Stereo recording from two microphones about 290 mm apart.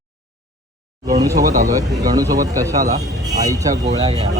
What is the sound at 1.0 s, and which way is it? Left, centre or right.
Speech, centre.